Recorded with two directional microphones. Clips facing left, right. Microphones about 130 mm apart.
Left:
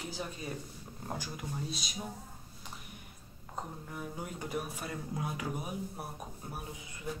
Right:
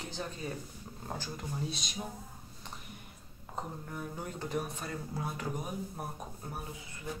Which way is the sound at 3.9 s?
10° left (ahead or behind).